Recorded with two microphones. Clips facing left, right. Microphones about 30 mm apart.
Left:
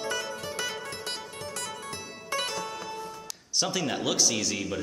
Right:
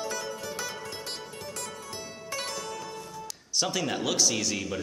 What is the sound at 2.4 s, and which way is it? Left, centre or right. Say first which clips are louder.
Music: left 2 dB; centre.